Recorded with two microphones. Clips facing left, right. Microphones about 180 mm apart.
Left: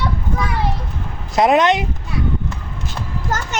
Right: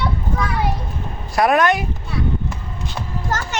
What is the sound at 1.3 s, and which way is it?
Speech, 20° left (ahead or behind).